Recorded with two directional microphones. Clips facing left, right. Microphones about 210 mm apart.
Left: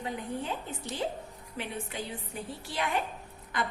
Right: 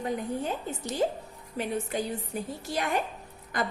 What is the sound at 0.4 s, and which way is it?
A woman's voice, 45° right (ahead or behind).